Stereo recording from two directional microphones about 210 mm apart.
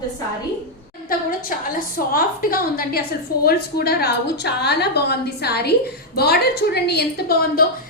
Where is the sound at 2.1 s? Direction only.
45° left (ahead or behind).